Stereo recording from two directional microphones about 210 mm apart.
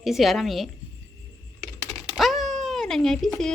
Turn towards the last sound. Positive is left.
turn(degrees=0)  # may be behind; listen again after turning